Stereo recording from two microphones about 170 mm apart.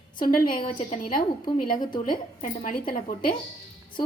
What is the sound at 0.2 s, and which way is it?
A woman's voice, 50° left (ahead or behind).